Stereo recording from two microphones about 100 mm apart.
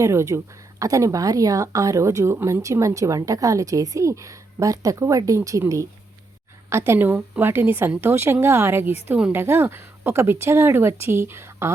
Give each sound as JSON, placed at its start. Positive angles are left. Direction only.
{"t": 0.0, "sound": "a woman's voice", "side_deg": -30}
{"t": 9.0, "sound": "a woman's voice", "side_deg": -10}
{"t": 9.3, "sound": "a woman's voice", "side_deg": -20}